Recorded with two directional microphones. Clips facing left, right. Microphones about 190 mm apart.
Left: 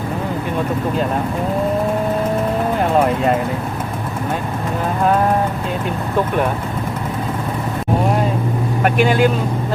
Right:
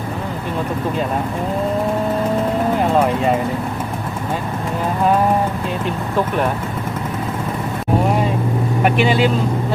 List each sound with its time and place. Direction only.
9.0 s speech: 50° left (ahead or behind)